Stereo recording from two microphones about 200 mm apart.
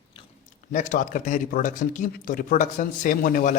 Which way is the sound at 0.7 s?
40° left (ahead or behind).